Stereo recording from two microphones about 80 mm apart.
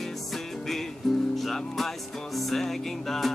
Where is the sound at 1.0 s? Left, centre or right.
Centre.